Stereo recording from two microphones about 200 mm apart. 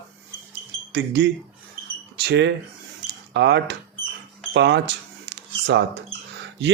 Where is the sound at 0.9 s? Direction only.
60° right (ahead or behind).